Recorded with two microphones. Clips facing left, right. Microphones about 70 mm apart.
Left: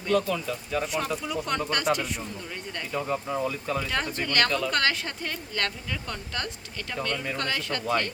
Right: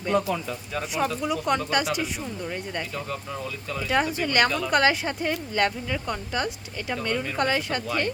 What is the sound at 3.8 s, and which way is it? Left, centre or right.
Speech, centre.